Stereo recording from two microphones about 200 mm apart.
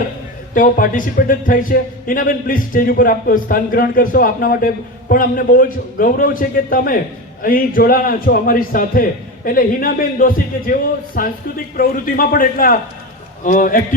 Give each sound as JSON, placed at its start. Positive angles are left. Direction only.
{"t": 0.5, "sound": "speech", "side_deg": 40}